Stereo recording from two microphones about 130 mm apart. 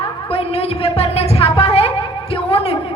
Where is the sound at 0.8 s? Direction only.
50° left (ahead or behind).